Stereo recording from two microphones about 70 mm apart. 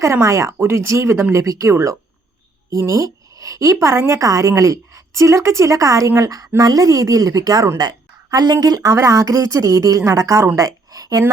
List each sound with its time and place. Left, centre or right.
0.0 s a woman's voice: right
3.9 s a woman's voice: right
4.2 s speech: right
6.6 s a woman's voice: right
7.8 s a woman's voice: right